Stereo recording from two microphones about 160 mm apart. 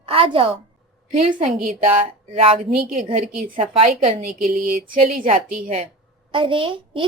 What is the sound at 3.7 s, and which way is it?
Speech, 35° right (ahead or behind).